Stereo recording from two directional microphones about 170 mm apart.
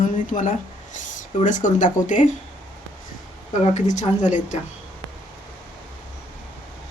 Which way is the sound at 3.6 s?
45° left (ahead or behind).